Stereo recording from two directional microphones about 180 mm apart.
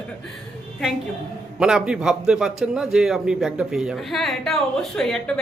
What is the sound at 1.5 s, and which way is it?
A man's voice, 5° right (ahead or behind).